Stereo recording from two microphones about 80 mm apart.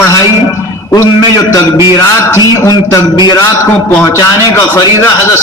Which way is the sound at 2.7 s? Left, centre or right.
Left.